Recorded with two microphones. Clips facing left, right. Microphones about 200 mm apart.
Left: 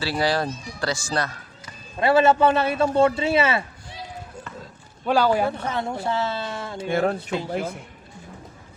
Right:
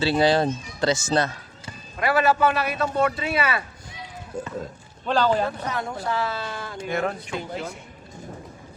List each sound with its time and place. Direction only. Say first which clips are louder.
0.0 s speech: right 4 dB; 25° right (ahead or behind)
2.0 s a man's voice: left 3 dB; 25° left (ahead or behind)
5.0 s speech: left 2 dB; 10° left (ahead or behind)
5.5 s a man's voice: left 2 dB; 25° left (ahead or behind)